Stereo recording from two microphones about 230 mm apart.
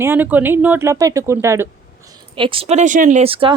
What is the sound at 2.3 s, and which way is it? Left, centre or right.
Speech, right.